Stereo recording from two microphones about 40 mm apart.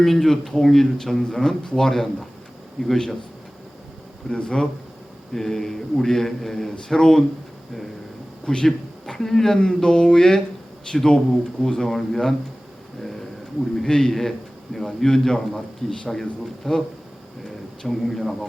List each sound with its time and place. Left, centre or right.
0.0 s a man's voice: centre
4.3 s mantra: left
5.3 s a man's voice: centre
8.4 s speech: centre
9.6 s mantra: centre
11.7 s a man's voice: centre
13.8 s a man's voice: centre
16.7 s mantra: centre
17.8 s speech: centre